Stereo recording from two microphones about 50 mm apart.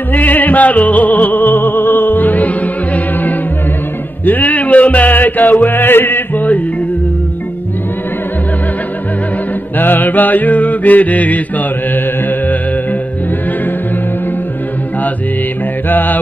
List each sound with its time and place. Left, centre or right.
0.1 s music: left
9.8 s mantra: left
15.9 s mantra: left